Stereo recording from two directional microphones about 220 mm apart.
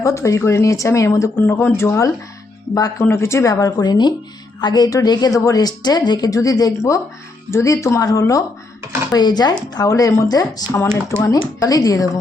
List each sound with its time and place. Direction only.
0.0 s speech: 15° left (ahead or behind)